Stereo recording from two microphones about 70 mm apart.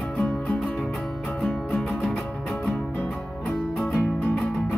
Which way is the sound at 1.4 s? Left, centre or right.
Centre.